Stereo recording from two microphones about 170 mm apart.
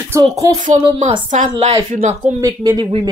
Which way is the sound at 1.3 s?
40° right (ahead or behind).